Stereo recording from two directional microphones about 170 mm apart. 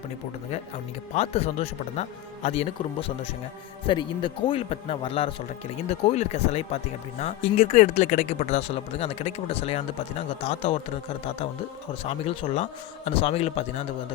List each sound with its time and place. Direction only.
1.1 s speech: 40° left (ahead or behind)
3.8 s speech: 30° left (ahead or behind)
12.0 s speech: 35° left (ahead or behind)